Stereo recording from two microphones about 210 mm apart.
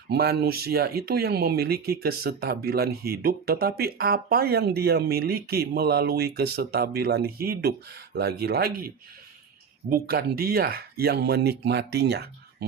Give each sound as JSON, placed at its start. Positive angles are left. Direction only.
{"t": 0.1, "sound": "speech", "side_deg": -50}
{"t": 9.9, "sound": "speech", "side_deg": -45}